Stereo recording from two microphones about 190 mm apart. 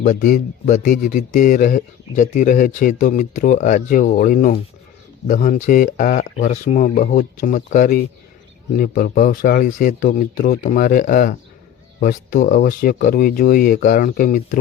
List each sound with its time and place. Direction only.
0.0 s speech: 40° left (ahead or behind)